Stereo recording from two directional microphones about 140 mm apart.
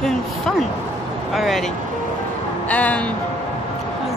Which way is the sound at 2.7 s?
10° left (ahead or behind).